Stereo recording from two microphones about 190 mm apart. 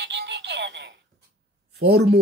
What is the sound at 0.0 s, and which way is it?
Speech, 65° right (ahead or behind).